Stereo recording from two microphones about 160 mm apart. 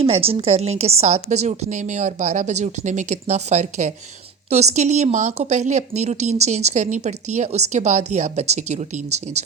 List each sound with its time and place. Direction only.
0.0 s speech: 40° right (ahead or behind)